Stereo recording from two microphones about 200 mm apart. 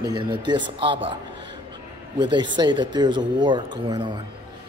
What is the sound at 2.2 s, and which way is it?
Speech, 20° right (ahead or behind).